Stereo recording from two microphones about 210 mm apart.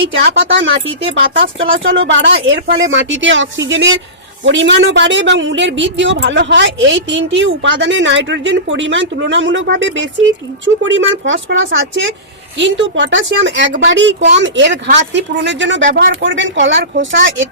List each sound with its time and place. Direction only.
0.1 s speech: 55° right (ahead or behind)